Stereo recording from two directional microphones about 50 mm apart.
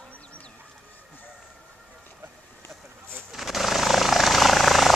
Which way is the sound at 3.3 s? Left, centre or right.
Centre.